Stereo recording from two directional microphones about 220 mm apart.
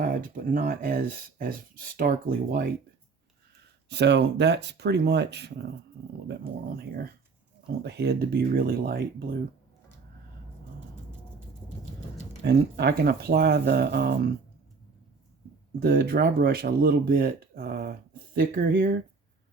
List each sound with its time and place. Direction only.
0.0 s speech: 40° right (ahead or behind)
3.8 s speech: 50° right (ahead or behind)
12.4 s speech: 50° right (ahead or behind)
15.8 s speech: 45° right (ahead or behind)